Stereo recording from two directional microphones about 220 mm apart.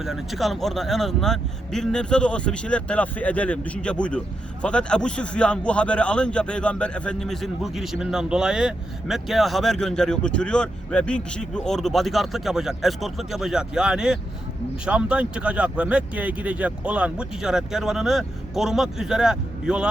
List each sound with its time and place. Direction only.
0.0 s a man's voice: centre (ahead or behind)